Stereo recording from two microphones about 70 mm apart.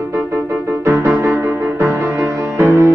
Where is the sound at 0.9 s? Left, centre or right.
Right.